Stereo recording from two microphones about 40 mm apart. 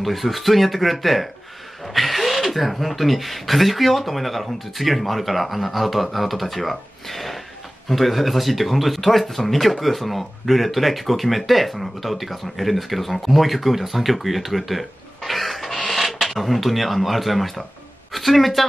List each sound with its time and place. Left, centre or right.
0.0 s speech: centre